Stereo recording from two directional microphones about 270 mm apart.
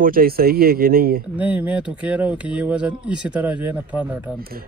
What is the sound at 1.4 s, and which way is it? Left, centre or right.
Speech, centre.